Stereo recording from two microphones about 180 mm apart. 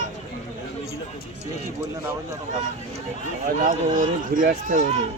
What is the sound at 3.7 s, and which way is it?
Speech, 50° right (ahead or behind).